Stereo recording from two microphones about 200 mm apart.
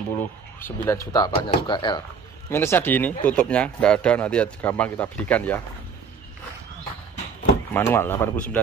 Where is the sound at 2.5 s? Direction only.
10° left (ahead or behind).